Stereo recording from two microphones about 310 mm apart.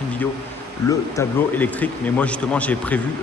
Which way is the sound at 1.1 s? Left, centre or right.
Centre.